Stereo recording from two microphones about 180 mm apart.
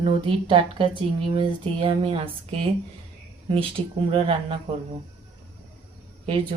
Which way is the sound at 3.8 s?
35° right (ahead or behind).